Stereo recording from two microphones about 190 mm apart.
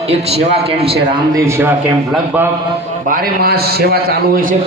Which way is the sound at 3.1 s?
55° right (ahead or behind).